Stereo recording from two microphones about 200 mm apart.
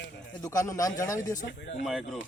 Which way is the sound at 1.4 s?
65° left (ahead or behind).